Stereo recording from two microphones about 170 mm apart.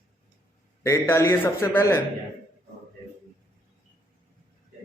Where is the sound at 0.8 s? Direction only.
15° left (ahead or behind).